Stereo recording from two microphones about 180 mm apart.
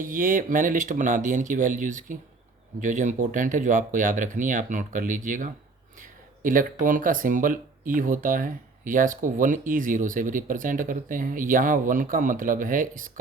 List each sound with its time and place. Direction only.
0.0 s speech: 50° right (ahead or behind)